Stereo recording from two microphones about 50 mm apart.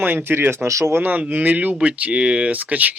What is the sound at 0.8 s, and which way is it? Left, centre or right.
Speech, right.